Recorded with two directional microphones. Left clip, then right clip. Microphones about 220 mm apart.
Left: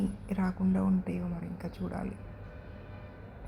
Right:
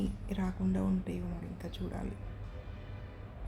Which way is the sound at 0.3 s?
Centre (ahead or behind).